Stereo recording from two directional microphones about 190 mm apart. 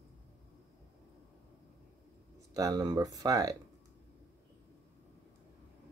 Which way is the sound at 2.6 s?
20° right (ahead or behind).